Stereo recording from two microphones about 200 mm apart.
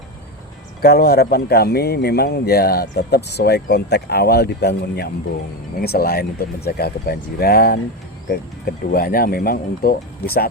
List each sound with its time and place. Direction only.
0.8 s speech: 50° left (ahead or behind)
8.9 s speech: 50° left (ahead or behind)